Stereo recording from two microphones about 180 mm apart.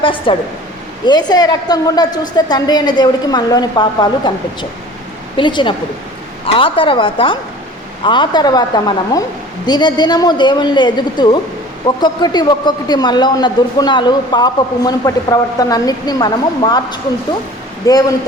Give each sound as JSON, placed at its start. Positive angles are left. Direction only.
{"t": 0.0, "sound": "speech", "side_deg": 30}
{"t": 5.4, "sound": "speech", "side_deg": 25}